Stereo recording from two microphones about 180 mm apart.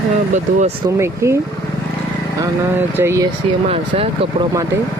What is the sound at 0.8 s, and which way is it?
Speech, 15° right (ahead or behind).